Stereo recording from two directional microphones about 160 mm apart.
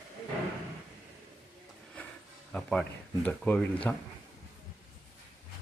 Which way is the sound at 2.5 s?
5° left (ahead or behind).